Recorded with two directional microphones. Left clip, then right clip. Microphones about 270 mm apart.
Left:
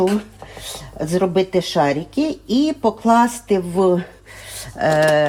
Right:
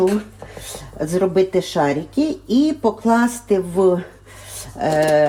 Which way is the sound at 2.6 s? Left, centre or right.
Left.